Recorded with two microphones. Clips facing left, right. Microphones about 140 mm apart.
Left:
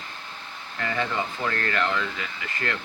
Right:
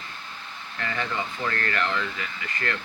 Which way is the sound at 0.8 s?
20° left (ahead or behind).